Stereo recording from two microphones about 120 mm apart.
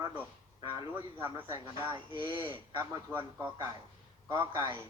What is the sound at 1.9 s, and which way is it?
Speech, 45° right (ahead or behind).